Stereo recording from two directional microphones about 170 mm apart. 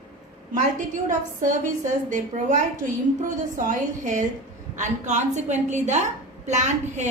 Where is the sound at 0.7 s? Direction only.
50° right (ahead or behind).